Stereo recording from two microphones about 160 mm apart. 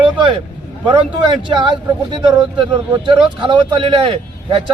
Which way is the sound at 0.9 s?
30° right (ahead or behind).